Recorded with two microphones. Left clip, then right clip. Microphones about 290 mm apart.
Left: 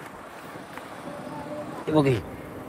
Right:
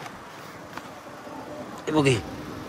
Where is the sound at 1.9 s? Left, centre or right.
Centre.